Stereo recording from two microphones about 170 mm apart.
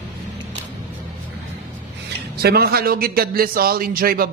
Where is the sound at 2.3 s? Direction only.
65° right (ahead or behind).